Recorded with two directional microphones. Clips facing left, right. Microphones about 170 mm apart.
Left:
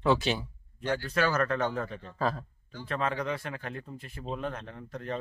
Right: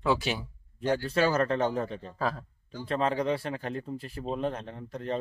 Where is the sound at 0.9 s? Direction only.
30° right (ahead or behind).